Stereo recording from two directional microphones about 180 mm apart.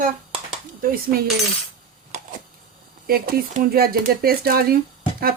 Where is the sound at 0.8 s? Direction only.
55° right (ahead or behind).